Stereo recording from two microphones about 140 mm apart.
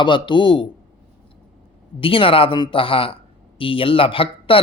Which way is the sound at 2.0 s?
40° left (ahead or behind).